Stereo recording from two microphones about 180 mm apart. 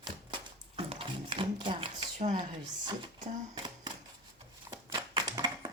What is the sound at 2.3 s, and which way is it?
Drawer open or close, 25° right (ahead or behind).